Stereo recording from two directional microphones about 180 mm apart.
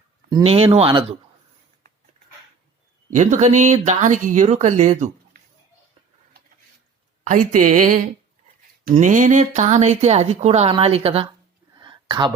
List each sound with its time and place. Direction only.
0.4 s speech: 35° right (ahead or behind)
3.1 s speech: 40° right (ahead or behind)
7.3 s speech: 45° right (ahead or behind)
11.8 s whispering: 25° right (ahead or behind)